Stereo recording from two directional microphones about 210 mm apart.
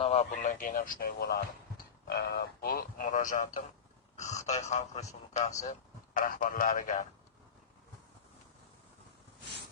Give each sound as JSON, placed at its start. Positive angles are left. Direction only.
{"t": 0.0, "sound": "a man's voice", "side_deg": 30}